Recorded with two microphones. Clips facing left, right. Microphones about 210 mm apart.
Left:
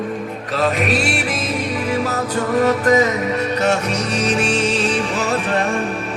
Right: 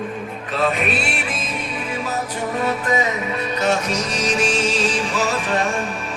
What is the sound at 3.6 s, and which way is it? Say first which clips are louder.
Music: right 2 dB; 65° left (ahead or behind).